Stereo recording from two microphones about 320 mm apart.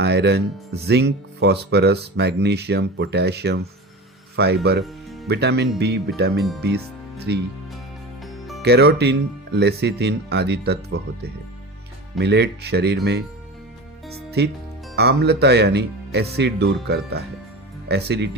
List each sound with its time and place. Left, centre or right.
0.0 s speech: right
4.8 s music: centre
5.3 s speech: right
8.2 s music: centre
8.6 s speech: right
14.3 s music: right
14.9 s speech: right